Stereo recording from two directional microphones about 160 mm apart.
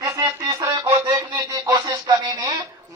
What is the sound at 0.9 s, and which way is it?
Music, 25° right (ahead or behind).